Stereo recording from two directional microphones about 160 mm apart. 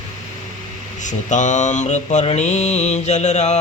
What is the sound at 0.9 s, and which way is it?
Speech, 50° left (ahead or behind).